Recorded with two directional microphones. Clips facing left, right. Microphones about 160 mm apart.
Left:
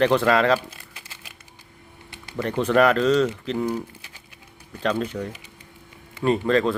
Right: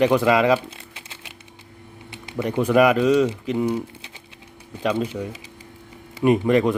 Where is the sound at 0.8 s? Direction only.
20° right (ahead or behind).